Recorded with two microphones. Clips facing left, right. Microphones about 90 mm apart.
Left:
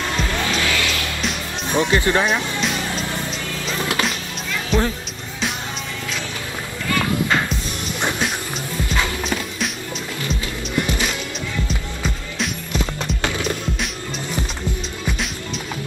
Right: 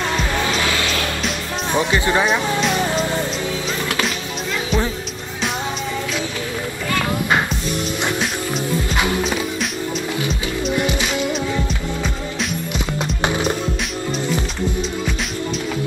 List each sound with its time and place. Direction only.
1.8 s speech: centre (ahead or behind)
4.7 s music: centre (ahead or behind)
13.0 s music: 20° right (ahead or behind)